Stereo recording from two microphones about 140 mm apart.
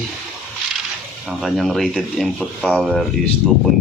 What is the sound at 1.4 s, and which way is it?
Speech, centre (ahead or behind).